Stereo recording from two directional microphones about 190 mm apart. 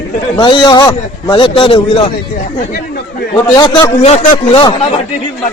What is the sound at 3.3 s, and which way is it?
Speech, 20° left (ahead or behind).